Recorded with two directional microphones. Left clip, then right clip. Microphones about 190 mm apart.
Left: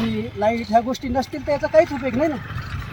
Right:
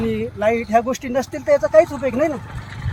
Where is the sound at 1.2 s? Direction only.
15° right (ahead or behind).